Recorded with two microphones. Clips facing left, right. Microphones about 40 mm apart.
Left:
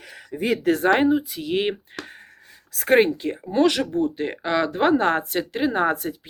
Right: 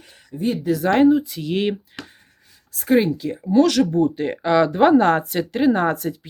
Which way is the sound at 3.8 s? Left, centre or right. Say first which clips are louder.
Right 4 dB; centre.